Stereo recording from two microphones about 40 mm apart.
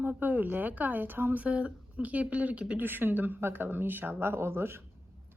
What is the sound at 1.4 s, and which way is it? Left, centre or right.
A woman's voice, right.